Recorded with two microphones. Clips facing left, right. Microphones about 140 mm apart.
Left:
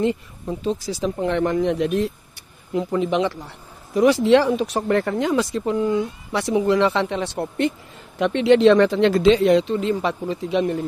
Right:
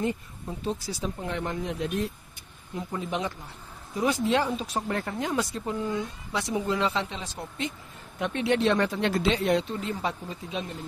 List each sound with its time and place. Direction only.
0.7 s speech: 90° left; by 2.0 s 75° left (ahead or behind)
2.7 s a man's voice: 85° left
6.3 s speech: 70° left (ahead or behind)
8.2 s speech: 90° left; by 10.8 s 75° left (ahead or behind)